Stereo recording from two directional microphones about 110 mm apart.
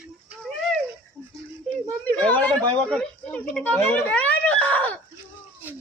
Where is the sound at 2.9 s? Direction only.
10° left (ahead or behind).